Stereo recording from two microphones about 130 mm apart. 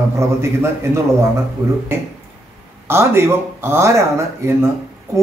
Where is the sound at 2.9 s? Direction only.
20° right (ahead or behind).